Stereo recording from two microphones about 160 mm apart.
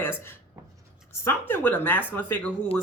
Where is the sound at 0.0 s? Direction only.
15° left (ahead or behind).